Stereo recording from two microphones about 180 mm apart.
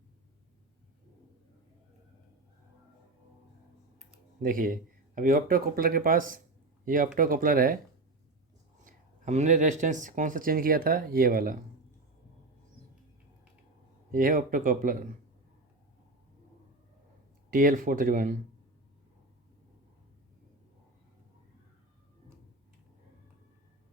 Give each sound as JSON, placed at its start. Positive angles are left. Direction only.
{"t": 4.4, "sound": "speech", "side_deg": -50}
{"t": 8.8, "sound": "speech", "side_deg": -45}
{"t": 14.1, "sound": "speech", "side_deg": -50}
{"t": 17.5, "sound": "speech", "side_deg": -50}